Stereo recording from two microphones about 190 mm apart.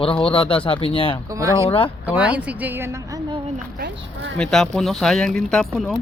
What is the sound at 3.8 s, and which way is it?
Speech, 65° right (ahead or behind).